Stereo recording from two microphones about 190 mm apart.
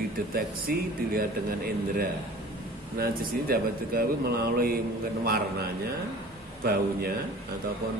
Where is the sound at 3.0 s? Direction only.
50° right (ahead or behind).